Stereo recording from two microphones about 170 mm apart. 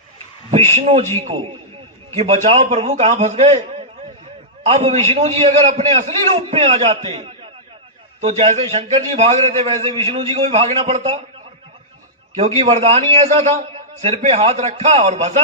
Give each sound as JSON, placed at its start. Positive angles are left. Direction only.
{"t": 0.5, "sound": "a man's voice", "side_deg": -35}
{"t": 12.4, "sound": "a man's voice", "side_deg": -40}